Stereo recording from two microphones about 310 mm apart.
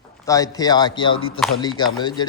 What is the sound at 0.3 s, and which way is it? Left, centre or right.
A man's voice, centre.